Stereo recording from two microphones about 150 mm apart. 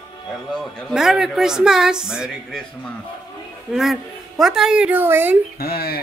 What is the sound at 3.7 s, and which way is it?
Speech, centre (ahead or behind).